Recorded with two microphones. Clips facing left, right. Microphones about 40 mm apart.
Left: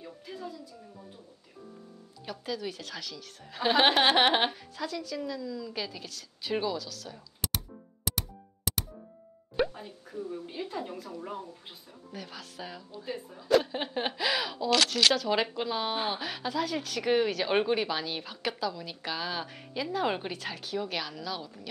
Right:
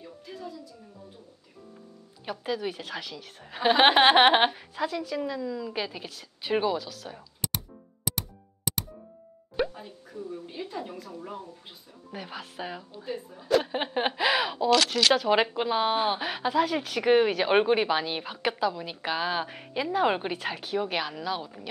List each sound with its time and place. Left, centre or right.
0.0 s a woman's voice: centre
2.2 s speech: right
7.4 s music: centre
9.6 s speech: centre
12.1 s speech: right
13.0 s speech: centre
13.7 s speech: right